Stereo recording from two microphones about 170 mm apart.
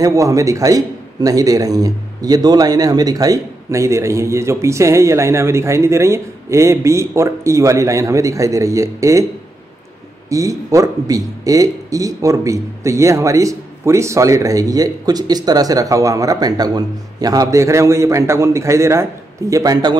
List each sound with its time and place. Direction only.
0.0 s a man's voice: 20° right (ahead or behind)
10.3 s a man's voice: 20° right (ahead or behind)